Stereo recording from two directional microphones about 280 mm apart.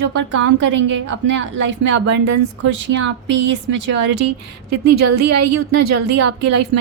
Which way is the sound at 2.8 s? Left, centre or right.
Right.